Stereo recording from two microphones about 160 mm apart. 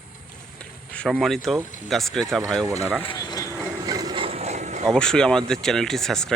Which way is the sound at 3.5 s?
15° right (ahead or behind).